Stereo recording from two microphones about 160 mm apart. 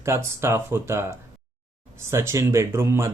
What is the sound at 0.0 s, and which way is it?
Speech, 15° right (ahead or behind).